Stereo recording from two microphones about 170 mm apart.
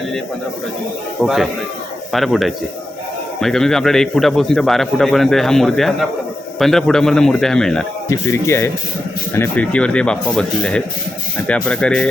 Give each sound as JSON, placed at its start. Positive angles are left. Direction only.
{"t": 1.2, "sound": "a man's voice", "side_deg": 0}
{"t": 8.1, "sound": "a man's voice", "side_deg": 15}